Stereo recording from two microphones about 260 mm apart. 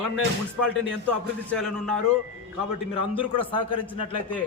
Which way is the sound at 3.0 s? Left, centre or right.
Centre.